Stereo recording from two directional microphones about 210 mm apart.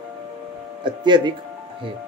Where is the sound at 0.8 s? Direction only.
20° right (ahead or behind).